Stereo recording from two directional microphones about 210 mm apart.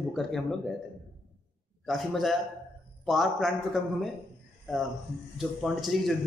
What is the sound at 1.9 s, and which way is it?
A man's voice, centre (ahead or behind).